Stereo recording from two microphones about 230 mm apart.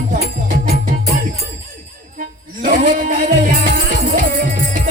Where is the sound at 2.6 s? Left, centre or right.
Right.